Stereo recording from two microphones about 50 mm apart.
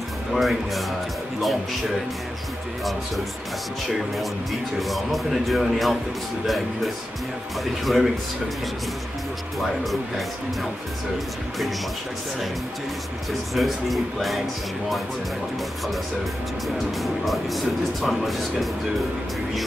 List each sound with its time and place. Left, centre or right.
0.3 s speech: centre
4.7 s speech: centre
9.6 s speech: centre
13.3 s speech: centre
16.6 s speech: centre